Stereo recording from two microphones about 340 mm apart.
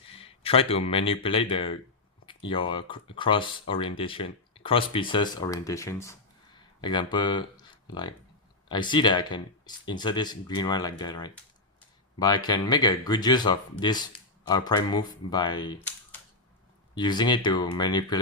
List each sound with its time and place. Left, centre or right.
0.2 s a sound: centre
0.9 s speech: centre
16.9 s speech: centre